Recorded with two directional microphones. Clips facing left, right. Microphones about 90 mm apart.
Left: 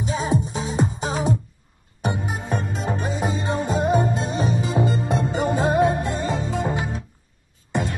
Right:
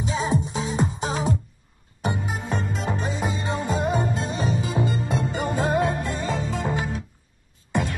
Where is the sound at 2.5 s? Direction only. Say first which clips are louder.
Left 2 dB; 55° left (ahead or behind).